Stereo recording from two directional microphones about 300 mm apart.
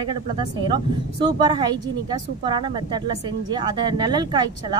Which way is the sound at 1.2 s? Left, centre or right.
Centre.